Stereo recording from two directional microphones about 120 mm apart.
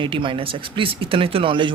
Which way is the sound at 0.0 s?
45° right (ahead or behind).